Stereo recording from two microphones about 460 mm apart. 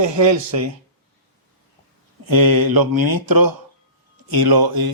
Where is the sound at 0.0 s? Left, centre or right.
Right.